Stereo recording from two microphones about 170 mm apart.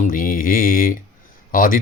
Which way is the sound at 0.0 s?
55° left (ahead or behind).